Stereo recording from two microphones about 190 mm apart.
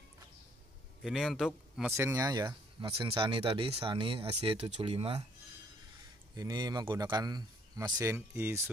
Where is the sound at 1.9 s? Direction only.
15° right (ahead or behind); by 5.2 s 30° right (ahead or behind).